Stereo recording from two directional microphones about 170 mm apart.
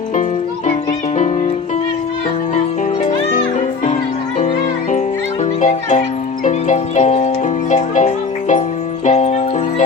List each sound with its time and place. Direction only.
4.4 s music: 45° left (ahead or behind)